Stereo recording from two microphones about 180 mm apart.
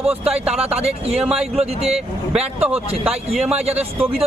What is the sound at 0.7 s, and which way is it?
Speech, 35° right (ahead or behind).